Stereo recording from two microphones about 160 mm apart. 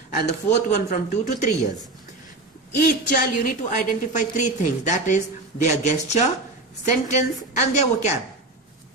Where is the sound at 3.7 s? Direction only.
50° left (ahead or behind).